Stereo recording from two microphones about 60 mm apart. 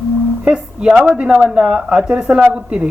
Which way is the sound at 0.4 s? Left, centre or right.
Centre.